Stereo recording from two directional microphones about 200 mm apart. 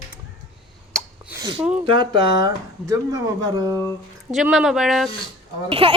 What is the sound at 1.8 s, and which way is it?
Speech, 25° right (ahead or behind).